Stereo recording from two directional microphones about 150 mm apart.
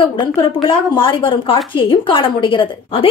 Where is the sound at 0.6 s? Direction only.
35° left (ahead or behind).